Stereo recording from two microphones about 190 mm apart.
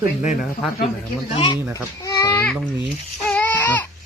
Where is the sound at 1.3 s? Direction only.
25° left (ahead or behind).